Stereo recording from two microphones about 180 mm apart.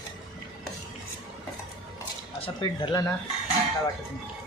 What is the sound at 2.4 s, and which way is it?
Speech, 30° left (ahead or behind).